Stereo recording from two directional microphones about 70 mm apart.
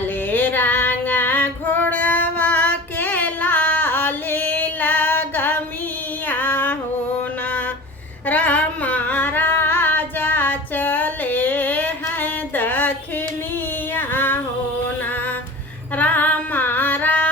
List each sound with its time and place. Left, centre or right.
0.3 s female singing: left
8.3 s a sound: left
13.9 s female singing: left
16.0 s singing: left